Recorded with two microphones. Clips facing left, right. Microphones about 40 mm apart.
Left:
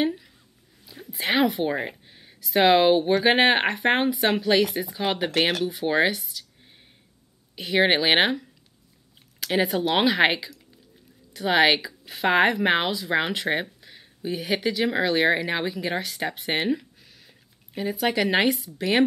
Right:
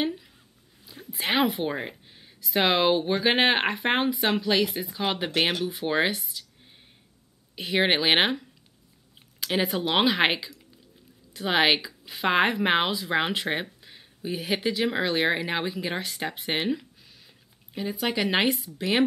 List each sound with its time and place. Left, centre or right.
0.8 s speech: centre
7.5 s speech: centre